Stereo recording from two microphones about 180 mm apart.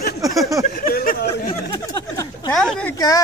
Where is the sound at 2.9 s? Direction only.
20° left (ahead or behind).